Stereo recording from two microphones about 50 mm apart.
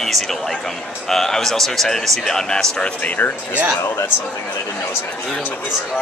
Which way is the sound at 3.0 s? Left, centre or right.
Left.